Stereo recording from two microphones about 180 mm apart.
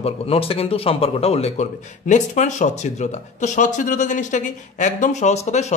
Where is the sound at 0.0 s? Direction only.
35° left (ahead or behind).